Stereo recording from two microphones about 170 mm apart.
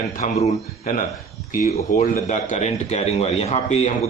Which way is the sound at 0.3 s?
45° left (ahead or behind).